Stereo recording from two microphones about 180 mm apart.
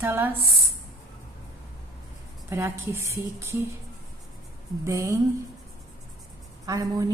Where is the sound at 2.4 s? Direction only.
15° right (ahead or behind).